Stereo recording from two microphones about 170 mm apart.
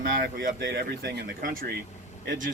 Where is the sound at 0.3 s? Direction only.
75° right (ahead or behind).